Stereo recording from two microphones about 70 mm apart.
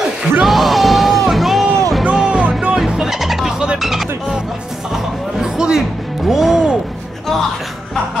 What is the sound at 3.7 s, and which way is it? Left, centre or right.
Speech, centre.